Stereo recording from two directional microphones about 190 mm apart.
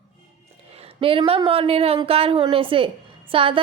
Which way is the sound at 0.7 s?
30° right (ahead or behind).